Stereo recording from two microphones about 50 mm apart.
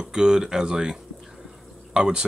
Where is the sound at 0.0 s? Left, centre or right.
Centre.